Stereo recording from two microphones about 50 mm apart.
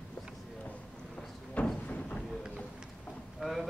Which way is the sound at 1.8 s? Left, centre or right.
Left.